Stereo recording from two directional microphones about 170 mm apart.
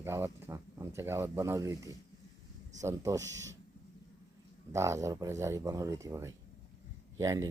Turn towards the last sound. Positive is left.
turn(degrees=-20)  # may be behind; listen again after turning